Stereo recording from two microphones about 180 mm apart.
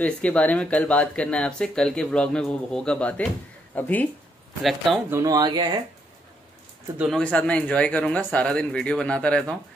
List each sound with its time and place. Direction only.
0.0 s speech: 5° left (ahead or behind)
5.1 s speech: 20° right (ahead or behind)
7.0 s speech: centre (ahead or behind)